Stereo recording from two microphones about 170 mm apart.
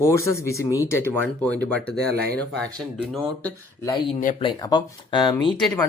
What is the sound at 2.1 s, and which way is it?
Speech, 65° right (ahead or behind).